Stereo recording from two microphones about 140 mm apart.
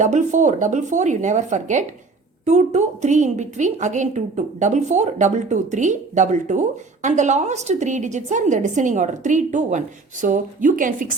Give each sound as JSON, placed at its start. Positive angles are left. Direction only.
{"t": 0.0, "sound": "a woman's voice", "side_deg": -60}